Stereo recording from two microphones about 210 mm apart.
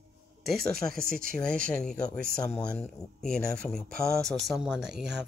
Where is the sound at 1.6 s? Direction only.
5° left (ahead or behind).